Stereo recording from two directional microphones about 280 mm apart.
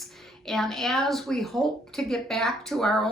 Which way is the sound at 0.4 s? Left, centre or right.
Centre.